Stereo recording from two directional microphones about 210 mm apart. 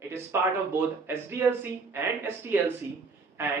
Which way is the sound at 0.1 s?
10° right (ahead or behind).